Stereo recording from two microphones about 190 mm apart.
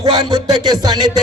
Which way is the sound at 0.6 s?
20° right (ahead or behind).